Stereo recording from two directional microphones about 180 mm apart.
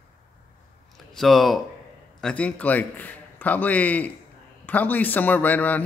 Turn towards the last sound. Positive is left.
turn(degrees=10)  # may be behind; listen again after turning